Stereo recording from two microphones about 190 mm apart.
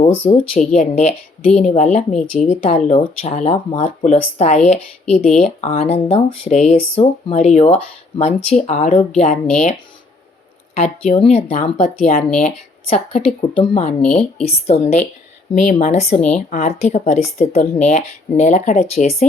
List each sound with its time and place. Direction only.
0.5 s speech: 40° left (ahead or behind)
10.8 s speech: 35° left (ahead or behind)
14.0 s a woman's voice: 5° left (ahead or behind)
14.4 s speech: 35° left (ahead or behind)